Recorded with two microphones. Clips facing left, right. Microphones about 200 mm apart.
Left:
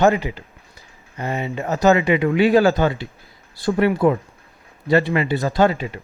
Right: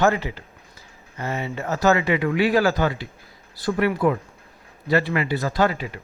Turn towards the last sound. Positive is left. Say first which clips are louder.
# left 4 dB
turn(degrees=25)  # may be behind; listen again after turning